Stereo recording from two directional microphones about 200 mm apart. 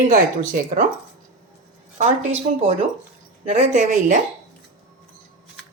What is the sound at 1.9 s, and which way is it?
Speech, 35° right (ahead or behind).